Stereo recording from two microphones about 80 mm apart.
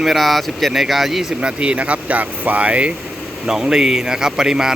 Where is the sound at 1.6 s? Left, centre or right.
Centre.